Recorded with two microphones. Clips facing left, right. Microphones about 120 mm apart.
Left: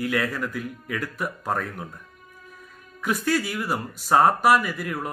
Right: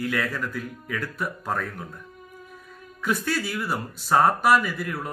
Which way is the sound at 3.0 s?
10° left (ahead or behind).